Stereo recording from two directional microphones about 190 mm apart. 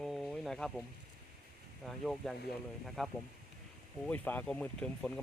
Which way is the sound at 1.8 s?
Centre (ahead or behind).